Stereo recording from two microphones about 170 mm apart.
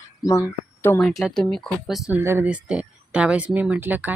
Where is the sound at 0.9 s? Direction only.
Centre (ahead or behind).